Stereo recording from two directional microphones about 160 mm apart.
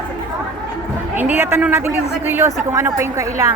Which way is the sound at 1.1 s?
15° right (ahead or behind).